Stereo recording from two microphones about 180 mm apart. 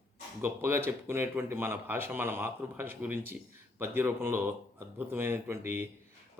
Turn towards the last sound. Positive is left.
turn(degrees=-10)  # may be behind; listen again after turning